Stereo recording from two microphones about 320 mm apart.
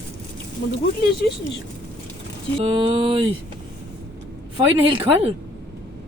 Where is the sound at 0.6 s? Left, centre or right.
Left.